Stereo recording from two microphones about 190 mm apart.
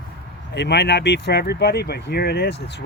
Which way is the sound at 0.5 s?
65° left (ahead or behind).